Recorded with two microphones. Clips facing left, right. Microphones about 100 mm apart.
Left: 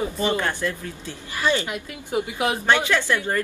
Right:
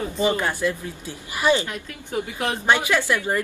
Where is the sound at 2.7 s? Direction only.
15° right (ahead or behind).